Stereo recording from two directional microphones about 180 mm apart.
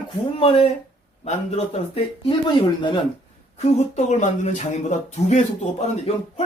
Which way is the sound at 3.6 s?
40° left (ahead or behind).